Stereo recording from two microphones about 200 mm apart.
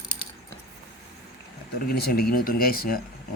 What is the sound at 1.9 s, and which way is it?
Speech, 50° left (ahead or behind).